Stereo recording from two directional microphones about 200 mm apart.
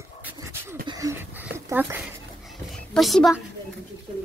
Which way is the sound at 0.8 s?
15° right (ahead or behind).